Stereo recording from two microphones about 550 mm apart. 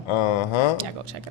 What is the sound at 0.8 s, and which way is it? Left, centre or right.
Speech, right.